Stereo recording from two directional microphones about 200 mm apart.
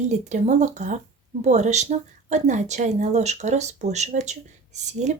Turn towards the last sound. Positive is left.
turn(degrees=-35)  # may be behind; listen again after turning